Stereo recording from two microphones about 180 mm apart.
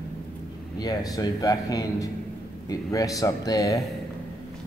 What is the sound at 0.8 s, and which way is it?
Speech, 20° left (ahead or behind).